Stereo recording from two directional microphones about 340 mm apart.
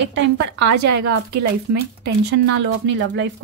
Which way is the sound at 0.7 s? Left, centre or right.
Right.